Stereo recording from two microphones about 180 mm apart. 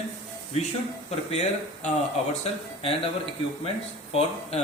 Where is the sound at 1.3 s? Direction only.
35° left (ahead or behind).